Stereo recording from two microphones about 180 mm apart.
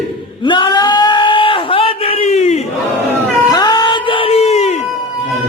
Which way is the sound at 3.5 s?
25° left (ahead or behind).